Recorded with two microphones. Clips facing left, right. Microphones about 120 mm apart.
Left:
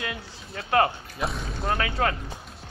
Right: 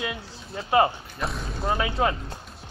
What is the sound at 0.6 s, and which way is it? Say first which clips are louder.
Speech: right 2 dB; 10° right (ahead or behind).